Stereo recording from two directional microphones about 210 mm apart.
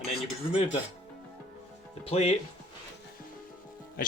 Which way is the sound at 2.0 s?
30° left (ahead or behind).